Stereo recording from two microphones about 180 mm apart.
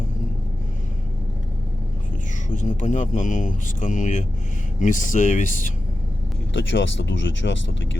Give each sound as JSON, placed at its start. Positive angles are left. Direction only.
{"t": 2.5, "sound": "speech", "side_deg": 45}
{"t": 6.5, "sound": "speech", "side_deg": 90}